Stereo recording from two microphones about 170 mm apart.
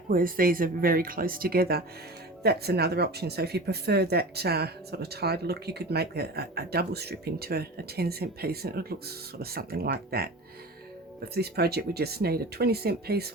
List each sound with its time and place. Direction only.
0.1 s speech: 55° right (ahead or behind)
11.3 s speech: 70° right (ahead or behind)